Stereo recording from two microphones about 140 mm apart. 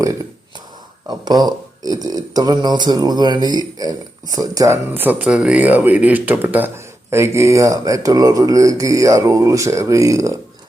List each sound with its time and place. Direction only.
1.0 s speech: 30° right (ahead or behind)